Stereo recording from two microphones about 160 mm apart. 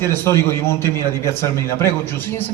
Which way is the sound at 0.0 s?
15° left (ahead or behind).